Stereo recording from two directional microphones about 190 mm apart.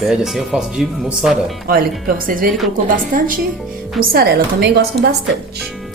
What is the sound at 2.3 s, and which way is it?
A woman's voice, 45° right (ahead or behind).